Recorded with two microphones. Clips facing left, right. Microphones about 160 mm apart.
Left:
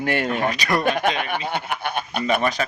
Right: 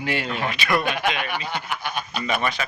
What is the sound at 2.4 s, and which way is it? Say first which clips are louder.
Speech: left 3 dB; 40° left (ahead or behind).